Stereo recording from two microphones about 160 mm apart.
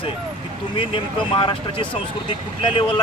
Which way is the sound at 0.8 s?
30° left (ahead or behind).